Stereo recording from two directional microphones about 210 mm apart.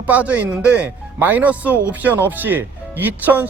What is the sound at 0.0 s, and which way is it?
Speech, 5° right (ahead or behind).